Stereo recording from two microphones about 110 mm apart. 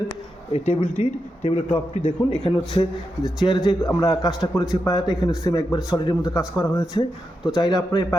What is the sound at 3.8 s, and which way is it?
Speech, 30° left (ahead or behind).